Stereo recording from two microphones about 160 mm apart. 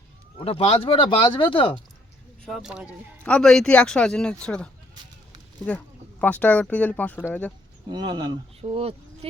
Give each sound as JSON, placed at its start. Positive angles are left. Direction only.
{"t": 0.3, "sound": "speech", "side_deg": 35}
{"t": 2.4, "sound": "speech", "side_deg": 0}
{"t": 3.2, "sound": "speech", "side_deg": 5}
{"t": 7.9, "sound": "speech", "side_deg": -30}